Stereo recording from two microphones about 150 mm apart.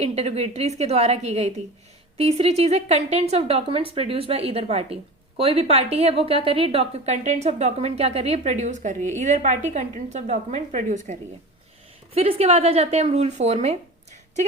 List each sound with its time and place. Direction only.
0.0 s a woman's voice: 45° right (ahead or behind)
12.1 s a woman's voice: 40° right (ahead or behind)